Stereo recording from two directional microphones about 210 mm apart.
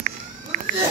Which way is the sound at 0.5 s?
40° right (ahead or behind).